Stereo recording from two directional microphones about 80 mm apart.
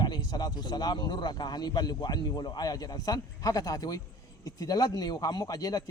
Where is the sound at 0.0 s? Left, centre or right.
Left.